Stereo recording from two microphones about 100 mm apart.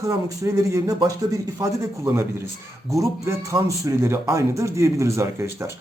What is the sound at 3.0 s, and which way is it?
Speech, 30° right (ahead or behind).